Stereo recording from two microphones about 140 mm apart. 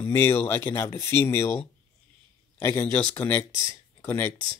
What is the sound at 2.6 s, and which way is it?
Speech, 15° left (ahead or behind).